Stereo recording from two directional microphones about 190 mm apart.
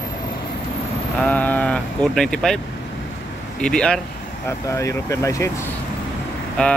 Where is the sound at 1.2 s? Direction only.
10° left (ahead or behind).